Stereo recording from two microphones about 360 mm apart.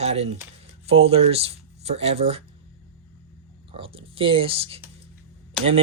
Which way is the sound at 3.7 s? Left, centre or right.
Centre.